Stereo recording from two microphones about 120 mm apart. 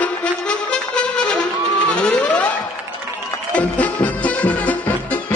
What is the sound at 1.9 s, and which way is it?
Music, 10° left (ahead or behind).